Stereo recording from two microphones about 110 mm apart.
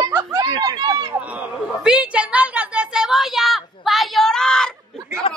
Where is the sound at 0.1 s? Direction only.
25° right (ahead or behind).